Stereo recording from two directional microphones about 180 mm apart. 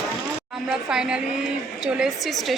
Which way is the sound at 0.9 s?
5° right (ahead or behind).